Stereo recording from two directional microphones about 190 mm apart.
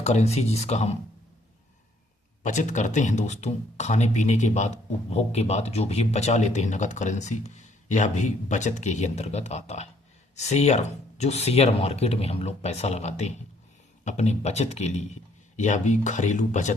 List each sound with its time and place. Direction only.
0.0 s speech: 35° left (ahead or behind)
2.4 s speech: 40° left (ahead or behind)